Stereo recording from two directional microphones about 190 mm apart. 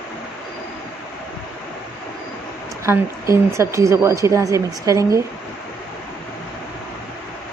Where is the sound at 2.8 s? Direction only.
15° right (ahead or behind).